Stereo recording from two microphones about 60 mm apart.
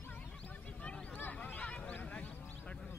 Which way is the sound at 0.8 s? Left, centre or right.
Centre.